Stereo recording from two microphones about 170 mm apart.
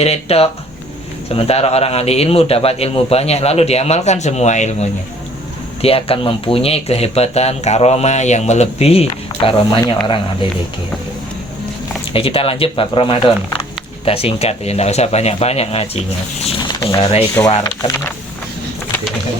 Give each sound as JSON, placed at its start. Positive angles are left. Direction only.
{"t": 0.0, "sound": "speech", "side_deg": 35}
{"t": 12.1, "sound": "speech", "side_deg": 35}